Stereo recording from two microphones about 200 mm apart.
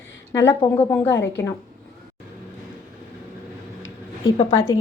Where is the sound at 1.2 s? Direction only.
65° left (ahead or behind).